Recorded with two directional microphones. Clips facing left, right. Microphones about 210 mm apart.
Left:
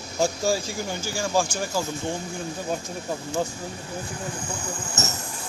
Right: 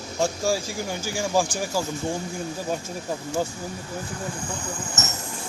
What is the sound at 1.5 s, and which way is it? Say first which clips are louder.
Speech: right 1 dB; 5° right (ahead or behind).